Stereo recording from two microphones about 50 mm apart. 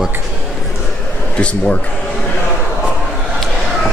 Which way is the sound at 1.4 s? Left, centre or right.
Left.